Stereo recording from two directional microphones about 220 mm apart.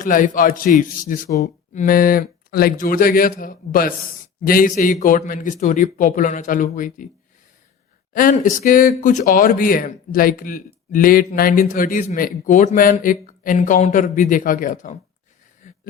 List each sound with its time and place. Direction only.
0.0 s speech: 35° left (ahead or behind)
8.1 s speech: 40° left (ahead or behind)